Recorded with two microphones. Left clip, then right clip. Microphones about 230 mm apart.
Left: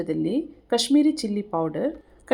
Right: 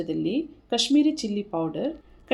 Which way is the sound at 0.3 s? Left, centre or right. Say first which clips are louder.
Left 2 dB; centre.